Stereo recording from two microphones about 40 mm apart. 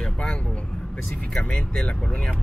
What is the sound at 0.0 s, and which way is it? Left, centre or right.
Vehicle, centre.